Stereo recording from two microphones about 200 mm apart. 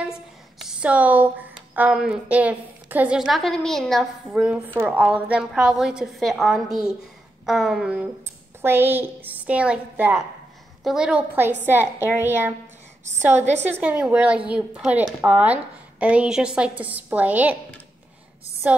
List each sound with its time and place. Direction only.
0.0 s a sound: 5° right (ahead or behind)
1.8 s a woman's voice: 5° right (ahead or behind)
13.7 s speech: 10° right (ahead or behind)
18.6 s speech: 5° right (ahead or behind)